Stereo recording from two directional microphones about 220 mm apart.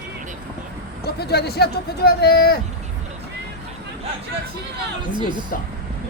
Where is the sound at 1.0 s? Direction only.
45° left (ahead or behind).